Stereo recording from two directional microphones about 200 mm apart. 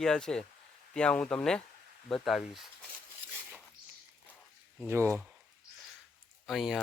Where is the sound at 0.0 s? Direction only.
5° left (ahead or behind).